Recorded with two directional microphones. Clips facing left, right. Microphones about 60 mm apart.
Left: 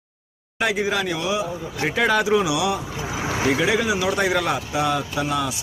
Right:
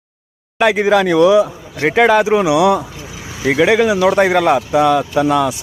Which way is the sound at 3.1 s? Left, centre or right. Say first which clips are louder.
Left 4 dB; left.